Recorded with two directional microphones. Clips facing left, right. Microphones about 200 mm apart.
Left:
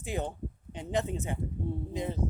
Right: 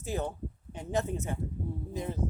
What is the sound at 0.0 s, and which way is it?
Speech, 15° left (ahead or behind).